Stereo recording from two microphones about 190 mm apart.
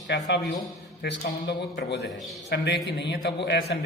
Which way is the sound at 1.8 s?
65° left (ahead or behind).